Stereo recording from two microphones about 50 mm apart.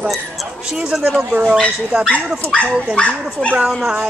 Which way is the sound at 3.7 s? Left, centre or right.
Centre.